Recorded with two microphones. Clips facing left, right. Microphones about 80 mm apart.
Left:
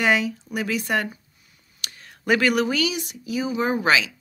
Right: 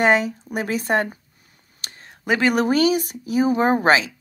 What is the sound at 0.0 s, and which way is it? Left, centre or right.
Speech, right.